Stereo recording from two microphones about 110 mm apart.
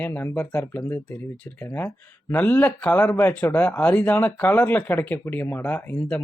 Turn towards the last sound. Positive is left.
turn(degrees=15)  # may be behind; listen again after turning